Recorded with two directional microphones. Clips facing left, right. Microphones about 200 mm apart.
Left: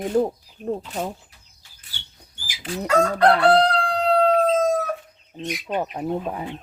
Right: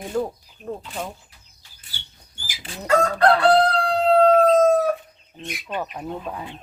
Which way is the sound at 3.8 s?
45° right (ahead or behind).